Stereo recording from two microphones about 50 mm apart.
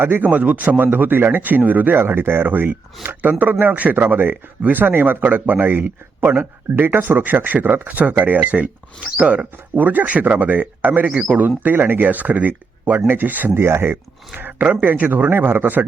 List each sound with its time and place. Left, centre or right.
0.2 s speech: right
13.5 s speech: right
14.6 s speech: right